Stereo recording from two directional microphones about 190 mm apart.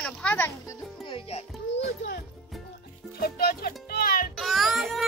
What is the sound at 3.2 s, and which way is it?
Music, 50° left (ahead or behind).